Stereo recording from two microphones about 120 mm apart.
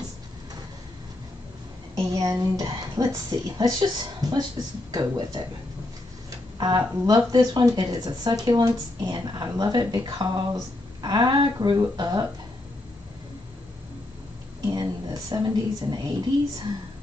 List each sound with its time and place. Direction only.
2.0 s a woman's voice: 30° right (ahead or behind)
14.7 s speech: 35° right (ahead or behind)